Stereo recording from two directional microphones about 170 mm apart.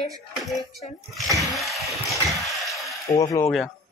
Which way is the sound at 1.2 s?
Centre (ahead or behind).